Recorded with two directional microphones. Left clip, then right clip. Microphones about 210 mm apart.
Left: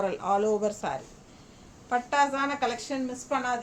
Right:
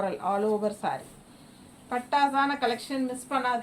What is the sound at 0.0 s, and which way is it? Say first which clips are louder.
Speech: left 1 dB; 30° left (ahead or behind).